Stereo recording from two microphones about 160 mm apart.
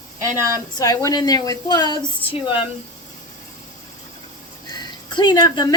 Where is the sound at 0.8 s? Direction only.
25° left (ahead or behind).